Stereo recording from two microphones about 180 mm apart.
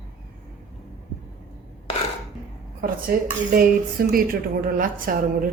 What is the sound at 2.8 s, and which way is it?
A woman's voice, 55° right (ahead or behind).